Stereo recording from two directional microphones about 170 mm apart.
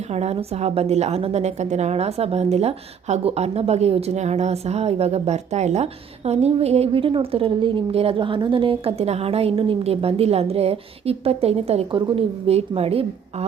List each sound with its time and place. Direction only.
0.1 s a woman's voice: 40° right (ahead or behind)